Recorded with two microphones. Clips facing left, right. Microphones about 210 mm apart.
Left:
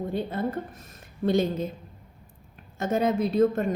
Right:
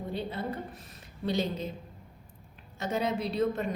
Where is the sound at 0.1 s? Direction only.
50° left (ahead or behind).